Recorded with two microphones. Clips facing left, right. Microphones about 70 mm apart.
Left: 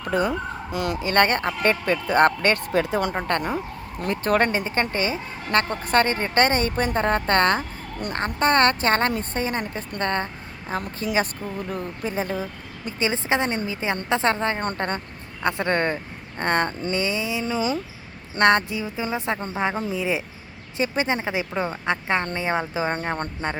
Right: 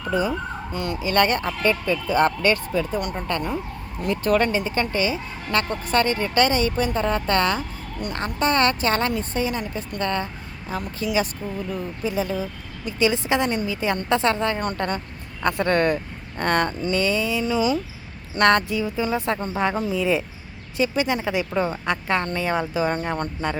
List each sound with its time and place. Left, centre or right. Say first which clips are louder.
0.1 s fowl: even; left
0.7 s speech: left 3 dB; left
1.0 s speech: even; left
2.7 s speech: left 2 dB; left
3.2 s speech: left 1 dB; left
4.0 s speech: right 1 dB; left
15.4 s speech: right 3 dB; left
17.4 s speech: right 3 dB; left
20.7 s speech: right 1 dB; left
23.0 s speech: right 1 dB; left